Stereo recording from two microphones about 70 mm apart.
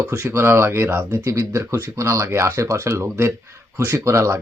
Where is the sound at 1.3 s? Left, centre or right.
Right.